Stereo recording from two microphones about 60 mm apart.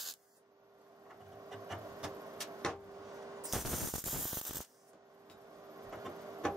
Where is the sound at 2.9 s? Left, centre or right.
Right.